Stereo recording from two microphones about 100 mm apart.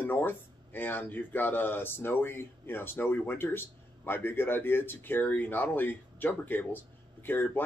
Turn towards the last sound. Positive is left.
turn(degrees=20)  # may be behind; listen again after turning